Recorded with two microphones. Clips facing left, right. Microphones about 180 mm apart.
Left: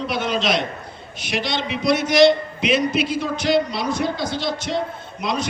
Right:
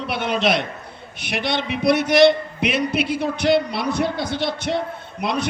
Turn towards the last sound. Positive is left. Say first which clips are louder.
# right 1 dB
turn(degrees=-60)  # may be behind; listen again after turning